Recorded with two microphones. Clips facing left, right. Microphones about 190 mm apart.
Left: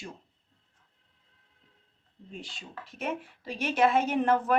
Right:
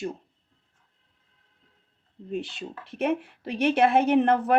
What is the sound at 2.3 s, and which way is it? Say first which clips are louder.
Speech: right 11 dB; 65° right (ahead or behind).